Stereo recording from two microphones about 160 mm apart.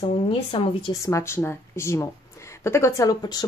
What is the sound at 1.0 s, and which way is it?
Speech, 15° left (ahead or behind).